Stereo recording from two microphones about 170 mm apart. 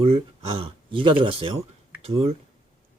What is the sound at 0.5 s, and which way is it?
Speech, 30° right (ahead or behind).